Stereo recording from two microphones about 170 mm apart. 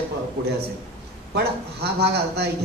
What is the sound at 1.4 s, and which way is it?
A man's voice, 75° right (ahead or behind).